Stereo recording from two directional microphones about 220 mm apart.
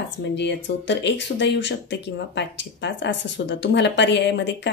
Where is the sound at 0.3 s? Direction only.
50° left (ahead or behind).